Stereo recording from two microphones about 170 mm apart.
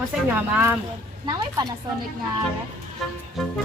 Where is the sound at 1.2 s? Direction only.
25° right (ahead or behind).